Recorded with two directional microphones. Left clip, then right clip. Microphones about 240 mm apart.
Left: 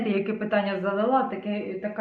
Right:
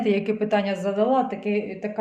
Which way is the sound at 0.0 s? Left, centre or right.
Right.